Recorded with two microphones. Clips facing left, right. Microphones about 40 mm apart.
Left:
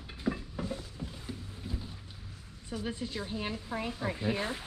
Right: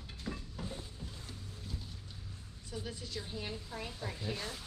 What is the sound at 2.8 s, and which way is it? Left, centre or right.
A woman's voice, left.